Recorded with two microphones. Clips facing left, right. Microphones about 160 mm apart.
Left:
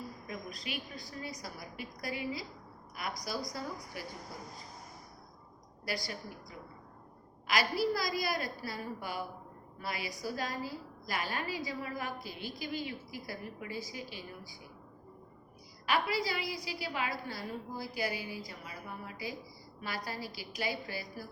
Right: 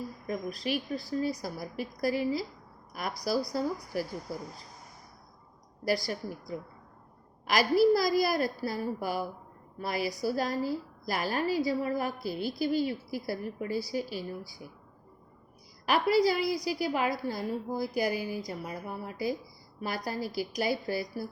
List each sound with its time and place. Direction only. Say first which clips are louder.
0.3 s a woman's voice: right 12 dB; 35° right (ahead or behind)
7.5 s a woman's voice: right 8 dB; 40° right (ahead or behind)
15.9 s a woman's voice: right 8 dB; 40° right (ahead or behind)